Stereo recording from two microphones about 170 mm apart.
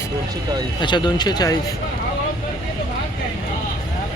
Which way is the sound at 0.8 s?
25° left (ahead or behind).